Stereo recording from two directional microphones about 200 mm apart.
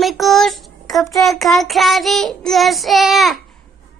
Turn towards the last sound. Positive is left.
turn(degrees=0)  # may be behind; listen again after turning